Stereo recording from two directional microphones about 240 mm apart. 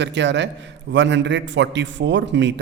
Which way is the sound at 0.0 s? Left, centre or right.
Right.